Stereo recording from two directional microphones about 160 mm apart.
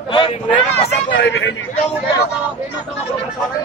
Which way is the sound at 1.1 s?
90° left.